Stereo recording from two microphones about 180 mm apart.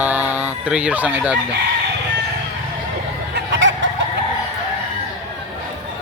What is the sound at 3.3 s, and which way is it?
Chicken, 90° right.